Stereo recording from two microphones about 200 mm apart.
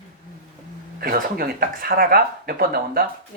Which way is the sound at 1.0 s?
45° right (ahead or behind).